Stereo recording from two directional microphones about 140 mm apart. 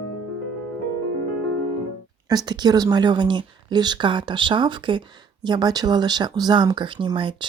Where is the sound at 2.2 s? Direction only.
30° right (ahead or behind).